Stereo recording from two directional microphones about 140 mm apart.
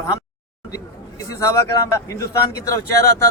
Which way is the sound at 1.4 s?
25° left (ahead or behind).